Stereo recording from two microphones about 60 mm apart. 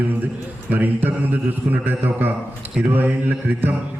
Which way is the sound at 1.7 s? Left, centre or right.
Right.